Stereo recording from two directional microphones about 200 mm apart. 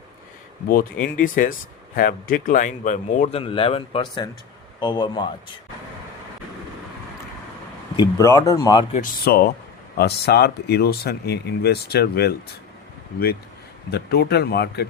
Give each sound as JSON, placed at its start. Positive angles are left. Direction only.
{"t": 0.7, "sound": "a man's voice", "side_deg": 45}
{"t": 7.9, "sound": "speech", "side_deg": 15}
{"t": 8.9, "sound": "speech", "side_deg": 45}
{"t": 13.9, "sound": "speech", "side_deg": 55}